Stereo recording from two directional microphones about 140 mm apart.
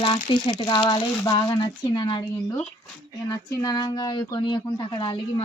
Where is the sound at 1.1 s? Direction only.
25° left (ahead or behind).